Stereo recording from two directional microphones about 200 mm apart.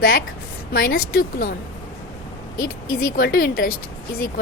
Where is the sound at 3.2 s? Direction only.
45° left (ahead or behind).